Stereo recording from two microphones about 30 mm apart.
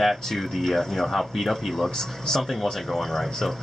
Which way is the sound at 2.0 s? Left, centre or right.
Centre.